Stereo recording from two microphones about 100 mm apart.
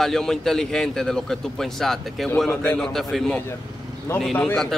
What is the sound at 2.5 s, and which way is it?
Speech, 20° left (ahead or behind).